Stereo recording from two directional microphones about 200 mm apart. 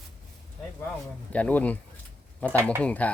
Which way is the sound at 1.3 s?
5° left (ahead or behind).